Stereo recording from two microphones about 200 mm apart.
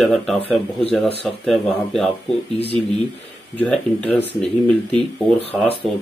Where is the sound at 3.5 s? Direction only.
5° left (ahead or behind).